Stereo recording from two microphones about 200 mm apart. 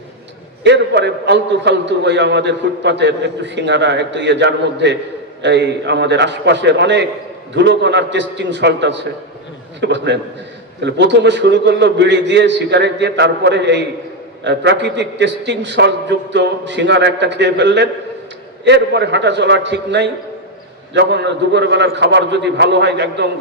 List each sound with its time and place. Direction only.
0.6 s a man's voice: 60° right (ahead or behind)